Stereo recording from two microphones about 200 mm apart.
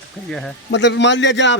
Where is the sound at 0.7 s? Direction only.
60° left (ahead or behind).